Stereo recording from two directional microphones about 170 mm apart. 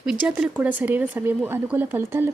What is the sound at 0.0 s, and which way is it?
A woman's voice, 5° right (ahead or behind).